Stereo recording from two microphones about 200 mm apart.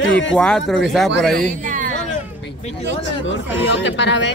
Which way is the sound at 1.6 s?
40° right (ahead or behind).